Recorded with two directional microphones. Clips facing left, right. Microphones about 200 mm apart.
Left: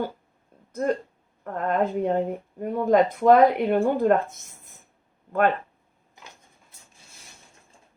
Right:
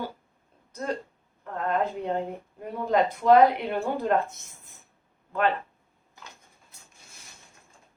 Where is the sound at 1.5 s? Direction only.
50° left (ahead or behind).